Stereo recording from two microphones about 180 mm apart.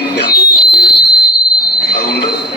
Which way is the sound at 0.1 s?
70° left (ahead or behind).